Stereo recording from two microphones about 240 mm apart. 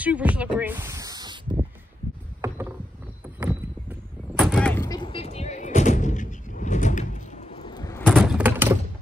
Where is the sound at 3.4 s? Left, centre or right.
Centre.